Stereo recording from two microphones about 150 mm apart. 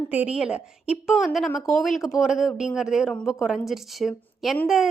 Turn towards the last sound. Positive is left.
turn(degrees=0)  # may be behind; listen again after turning